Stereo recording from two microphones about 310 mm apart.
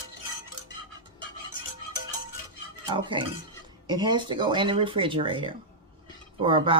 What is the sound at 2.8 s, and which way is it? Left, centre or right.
Speech, centre.